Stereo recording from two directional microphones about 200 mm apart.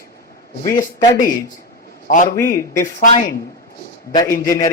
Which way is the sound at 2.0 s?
40° left (ahead or behind).